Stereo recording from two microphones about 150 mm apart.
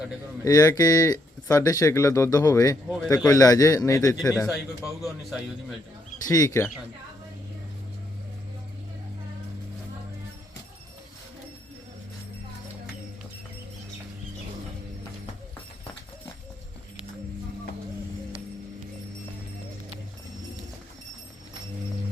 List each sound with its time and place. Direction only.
0.4 s speech: 20° left (ahead or behind)
4.4 s a man's voice: centre (ahead or behind)
6.2 s speech: 25° left (ahead or behind)